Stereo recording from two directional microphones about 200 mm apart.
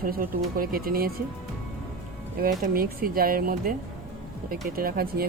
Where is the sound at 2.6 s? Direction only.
45° right (ahead or behind).